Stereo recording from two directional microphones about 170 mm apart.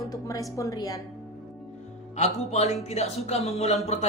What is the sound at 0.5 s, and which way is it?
Speech, 20° left (ahead or behind).